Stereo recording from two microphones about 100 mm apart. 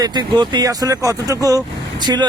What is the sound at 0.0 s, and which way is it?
Speech, 45° right (ahead or behind).